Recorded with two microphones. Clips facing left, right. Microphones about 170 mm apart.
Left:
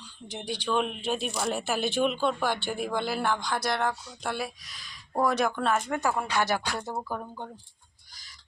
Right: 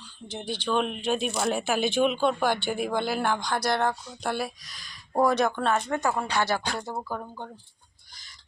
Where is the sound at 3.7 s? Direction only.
30° right (ahead or behind).